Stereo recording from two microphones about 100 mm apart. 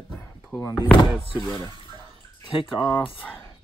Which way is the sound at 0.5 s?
35° left (ahead or behind).